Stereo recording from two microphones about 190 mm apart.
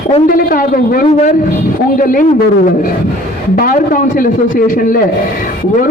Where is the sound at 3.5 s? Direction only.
45° left (ahead or behind).